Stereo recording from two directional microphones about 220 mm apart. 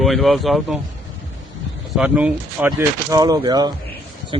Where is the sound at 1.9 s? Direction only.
5° right (ahead or behind).